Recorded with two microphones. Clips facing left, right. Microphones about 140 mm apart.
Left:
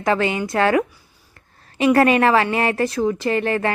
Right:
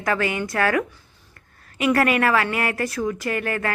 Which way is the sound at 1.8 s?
25° left (ahead or behind).